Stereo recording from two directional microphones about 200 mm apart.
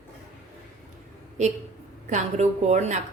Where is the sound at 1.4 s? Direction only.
35° right (ahead or behind).